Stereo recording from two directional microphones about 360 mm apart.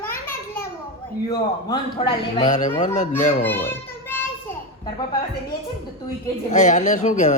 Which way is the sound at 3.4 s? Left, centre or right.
Centre.